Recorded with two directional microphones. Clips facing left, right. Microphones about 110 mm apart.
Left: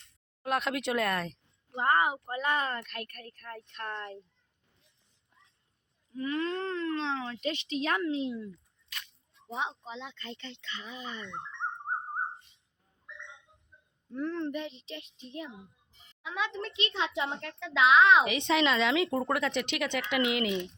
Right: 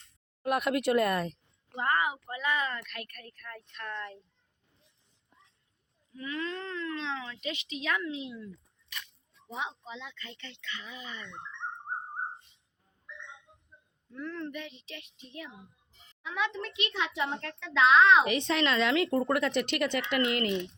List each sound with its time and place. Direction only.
0.4 s speech: 5° right (ahead or behind)
1.7 s a woman's voice: 30° left (ahead or behind)
6.1 s a woman's voice: 35° left (ahead or behind)
9.6 s speech: 25° left (ahead or behind)
14.1 s speech: 30° left (ahead or behind)
17.2 s a woman's voice: 15° left (ahead or behind)
18.3 s speech: centre (ahead or behind)